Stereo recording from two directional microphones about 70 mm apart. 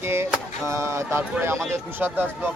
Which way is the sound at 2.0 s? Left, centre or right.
Right.